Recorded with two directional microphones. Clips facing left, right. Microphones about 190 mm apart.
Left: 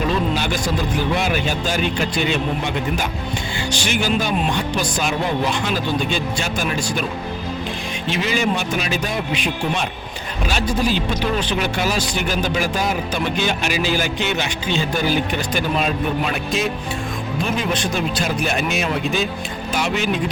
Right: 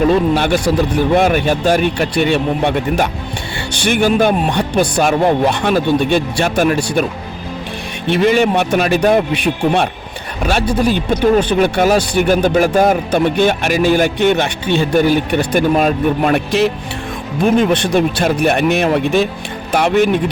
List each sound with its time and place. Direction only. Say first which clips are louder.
0.1 s speech: right 8 dB; 60° right (ahead or behind)
8.0 s speech: right 9 dB; 60° right (ahead or behind)
17.4 s speech: right 11 dB; 60° right (ahead or behind)